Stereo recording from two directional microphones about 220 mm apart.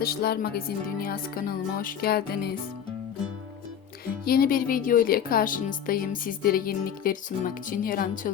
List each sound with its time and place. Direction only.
0.0 s music: 45° left (ahead or behind)
4.3 s speech: 40° left (ahead or behind)